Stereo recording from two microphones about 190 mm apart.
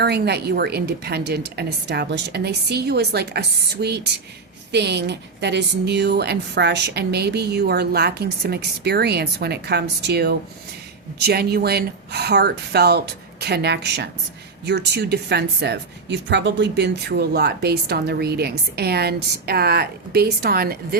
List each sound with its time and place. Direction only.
0.0 s speech: 60° right (ahead or behind)